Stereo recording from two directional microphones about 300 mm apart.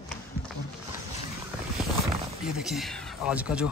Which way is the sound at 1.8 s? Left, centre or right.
Centre.